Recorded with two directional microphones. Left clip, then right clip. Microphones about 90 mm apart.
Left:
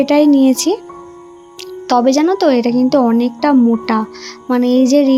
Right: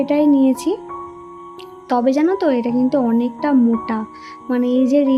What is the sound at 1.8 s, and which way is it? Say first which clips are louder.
A woman's voice: left 4 dB; 25° left (ahead or behind).